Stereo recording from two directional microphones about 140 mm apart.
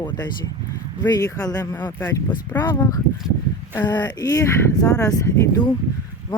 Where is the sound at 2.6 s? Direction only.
30° left (ahead or behind).